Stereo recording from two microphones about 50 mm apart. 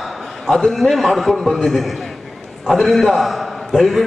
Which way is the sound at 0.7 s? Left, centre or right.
Centre.